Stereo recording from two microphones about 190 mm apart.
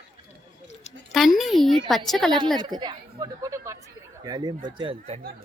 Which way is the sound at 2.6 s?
20° right (ahead or behind).